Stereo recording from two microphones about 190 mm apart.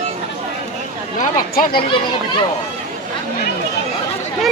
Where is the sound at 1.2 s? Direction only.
45° left (ahead or behind).